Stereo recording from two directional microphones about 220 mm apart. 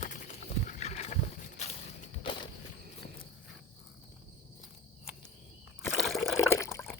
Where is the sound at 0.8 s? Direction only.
30° left (ahead or behind).